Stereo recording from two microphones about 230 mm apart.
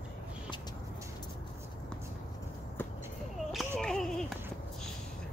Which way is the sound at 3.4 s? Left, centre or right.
Centre.